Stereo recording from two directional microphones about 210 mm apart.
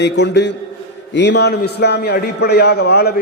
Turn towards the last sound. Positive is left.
turn(degrees=50)  # may be behind; listen again after turning